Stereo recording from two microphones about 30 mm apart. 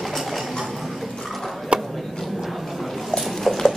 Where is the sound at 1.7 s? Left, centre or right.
Right.